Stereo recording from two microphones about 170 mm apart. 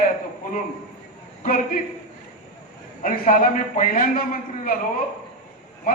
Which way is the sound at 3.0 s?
50° left (ahead or behind).